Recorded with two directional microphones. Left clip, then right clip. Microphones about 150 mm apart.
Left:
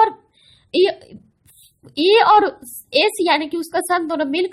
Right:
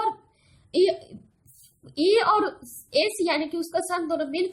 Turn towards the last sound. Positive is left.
turn(degrees=50)  # may be behind; listen again after turning